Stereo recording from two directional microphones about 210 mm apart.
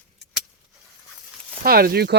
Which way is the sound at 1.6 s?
45° right (ahead or behind).